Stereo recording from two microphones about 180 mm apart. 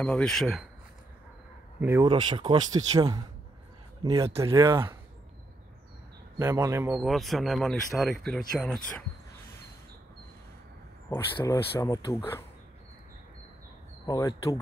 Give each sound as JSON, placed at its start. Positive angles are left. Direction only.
{"t": 0.0, "sound": "speech", "side_deg": 5}
{"t": 1.8, "sound": "speech", "side_deg": -10}
{"t": 2.0, "sound": "speech", "side_deg": -25}
{"t": 6.3, "sound": "speech", "side_deg": -15}
{"t": 7.0, "sound": "speech", "side_deg": 0}
{"t": 11.3, "sound": "speech", "side_deg": 15}
{"t": 14.0, "sound": "speech", "side_deg": 20}